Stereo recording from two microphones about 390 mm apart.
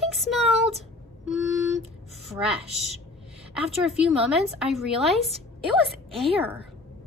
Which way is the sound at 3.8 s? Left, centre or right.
Centre.